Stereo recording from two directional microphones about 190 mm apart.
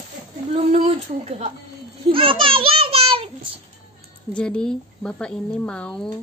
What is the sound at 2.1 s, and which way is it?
Children playing, 30° right (ahead or behind).